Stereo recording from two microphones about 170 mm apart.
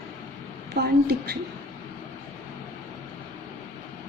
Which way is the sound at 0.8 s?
80° right.